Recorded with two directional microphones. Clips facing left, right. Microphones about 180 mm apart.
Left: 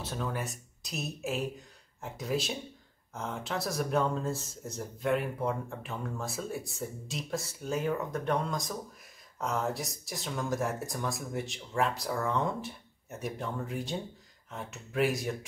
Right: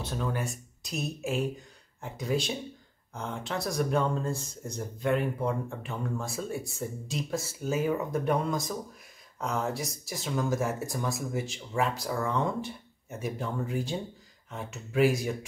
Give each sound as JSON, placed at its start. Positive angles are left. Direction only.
{"t": 0.0, "sound": "speech", "side_deg": 0}